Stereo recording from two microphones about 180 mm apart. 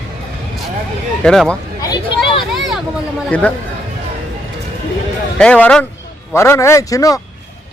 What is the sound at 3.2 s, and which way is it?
Speech, 5° left (ahead or behind).